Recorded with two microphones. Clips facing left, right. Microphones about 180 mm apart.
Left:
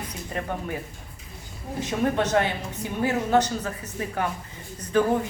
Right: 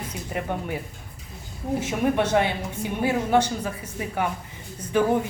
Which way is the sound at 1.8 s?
10° right (ahead or behind).